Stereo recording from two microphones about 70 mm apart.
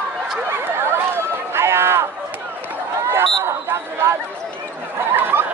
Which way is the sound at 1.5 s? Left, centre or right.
Right.